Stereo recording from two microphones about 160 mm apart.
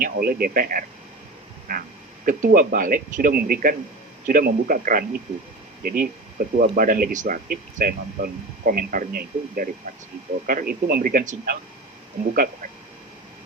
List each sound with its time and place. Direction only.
0.0 s speech: 65° right (ahead or behind)
1.7 s a sound: 60° right (ahead or behind)
2.2 s speech: 60° right (ahead or behind)